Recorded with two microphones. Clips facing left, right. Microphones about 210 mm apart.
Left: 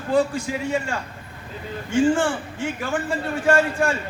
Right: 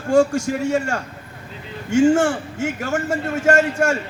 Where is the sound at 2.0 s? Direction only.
45° right (ahead or behind).